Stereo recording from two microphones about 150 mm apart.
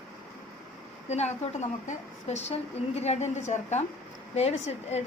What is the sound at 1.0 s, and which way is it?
A woman's voice, 45° left (ahead or behind).